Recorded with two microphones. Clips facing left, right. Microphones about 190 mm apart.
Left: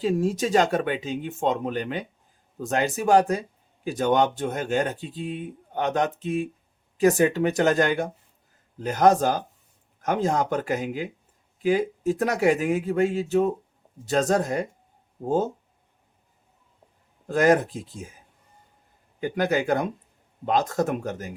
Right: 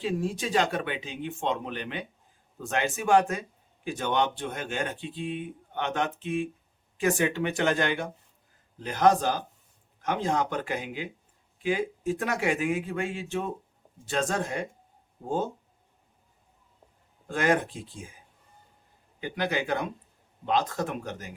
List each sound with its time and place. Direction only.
0.0 s speech: 40° left (ahead or behind)
17.2 s speech: 40° left (ahead or behind)
19.2 s speech: 45° left (ahead or behind)